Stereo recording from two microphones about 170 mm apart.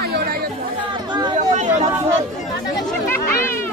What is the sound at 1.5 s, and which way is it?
Chatter, 45° right (ahead or behind).